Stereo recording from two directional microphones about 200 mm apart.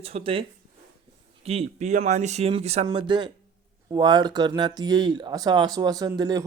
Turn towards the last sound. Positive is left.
turn(degrees=-20)  # may be behind; listen again after turning